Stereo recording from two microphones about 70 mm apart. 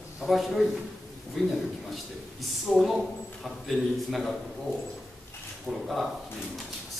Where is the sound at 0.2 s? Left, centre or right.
Centre.